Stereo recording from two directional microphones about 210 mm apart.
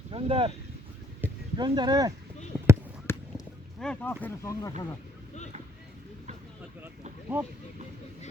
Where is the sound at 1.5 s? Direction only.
20° right (ahead or behind).